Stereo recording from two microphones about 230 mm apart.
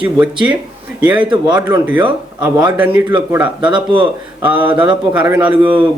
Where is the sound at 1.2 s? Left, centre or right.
Centre.